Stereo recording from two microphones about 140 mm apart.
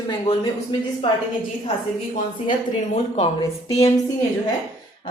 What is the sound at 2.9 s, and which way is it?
Speech, 45° left (ahead or behind).